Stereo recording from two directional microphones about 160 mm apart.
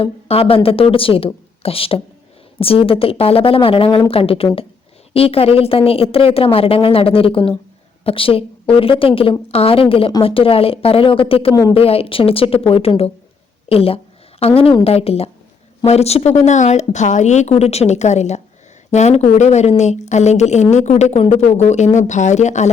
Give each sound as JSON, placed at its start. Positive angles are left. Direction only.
{"t": 0.0, "sound": "a woman's voice", "side_deg": 35}